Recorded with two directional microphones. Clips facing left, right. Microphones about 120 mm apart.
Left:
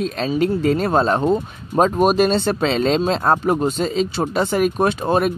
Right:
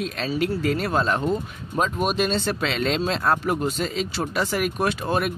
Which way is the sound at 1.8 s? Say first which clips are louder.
Left 8 dB; 40° left (ahead or behind).